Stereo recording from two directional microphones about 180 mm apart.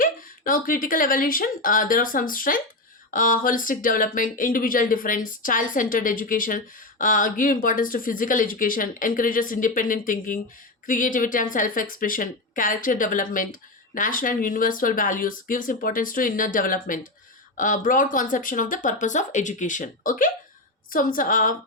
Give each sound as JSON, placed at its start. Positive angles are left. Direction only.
{"t": 0.0, "sound": "speech", "side_deg": 50}